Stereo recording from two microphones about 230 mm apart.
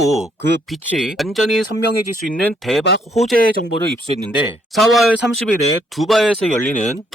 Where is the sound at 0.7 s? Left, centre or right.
Centre.